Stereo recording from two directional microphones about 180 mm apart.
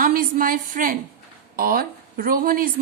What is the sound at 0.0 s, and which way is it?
A woman's voice, 50° right (ahead or behind).